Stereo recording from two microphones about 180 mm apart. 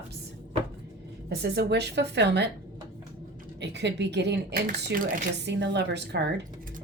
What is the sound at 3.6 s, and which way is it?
A woman's voice, 75° right (ahead or behind).